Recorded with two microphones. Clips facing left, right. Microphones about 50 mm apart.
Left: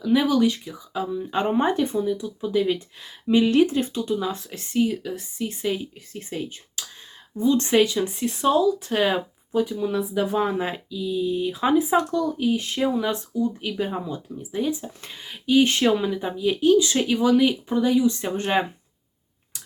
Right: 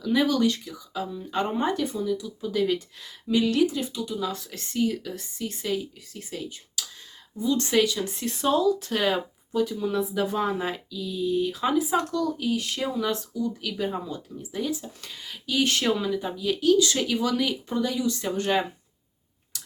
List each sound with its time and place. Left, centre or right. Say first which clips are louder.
0.0 s speech: left 3 dB; centre
6.1 s speech: left 4 dB; left; by 8.9 s centre
8.9 s speech: left 3 dB; centre
13.8 s speech: left 1 dB; centre